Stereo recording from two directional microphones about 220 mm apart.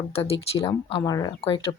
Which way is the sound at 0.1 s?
25° left (ahead or behind).